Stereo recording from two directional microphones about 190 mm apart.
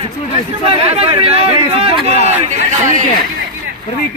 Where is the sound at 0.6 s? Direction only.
30° right (ahead or behind).